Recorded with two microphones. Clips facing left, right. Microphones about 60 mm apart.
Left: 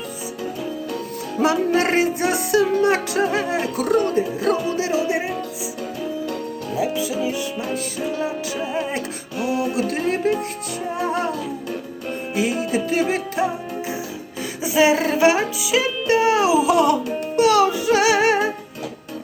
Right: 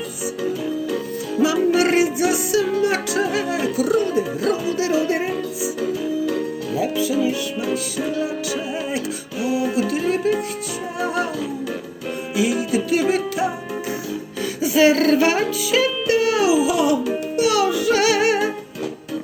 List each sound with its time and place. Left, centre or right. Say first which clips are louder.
1.4 s music: right 1 dB; left
4.8 s music: right 2 dB; left
6.7 s music: right 2 dB; left
9.7 s music: right 1 dB; left
12.4 s music: right 2 dB; left
14.6 s music: right 2 dB; left
15.7 s music: right 1 dB; centre
16.0 s music: left 3 dB; left
16.6 s music: left 2 dB; left
17.3 s music: left 3 dB; left